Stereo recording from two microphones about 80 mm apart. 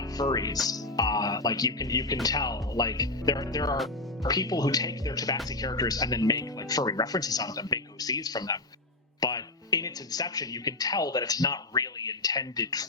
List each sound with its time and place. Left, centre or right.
0.2 s speech: left